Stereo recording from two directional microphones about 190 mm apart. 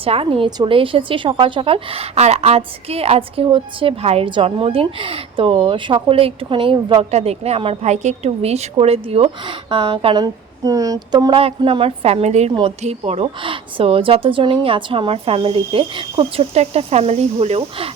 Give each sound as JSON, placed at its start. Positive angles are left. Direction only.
{"t": 0.0, "sound": "a woman's voice", "side_deg": -30}